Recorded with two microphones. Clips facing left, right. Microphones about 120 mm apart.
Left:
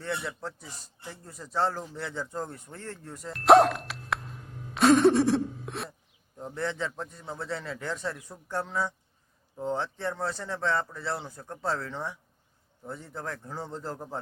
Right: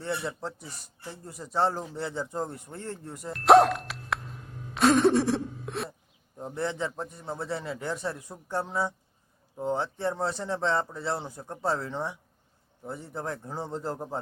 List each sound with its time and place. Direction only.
0.0 s a man's voice: 20° right (ahead or behind)
3.3 s a sound: centre (ahead or behind)
6.3 s speech: 15° right (ahead or behind)